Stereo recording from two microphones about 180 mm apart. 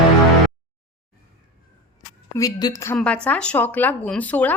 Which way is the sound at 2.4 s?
20° left (ahead or behind).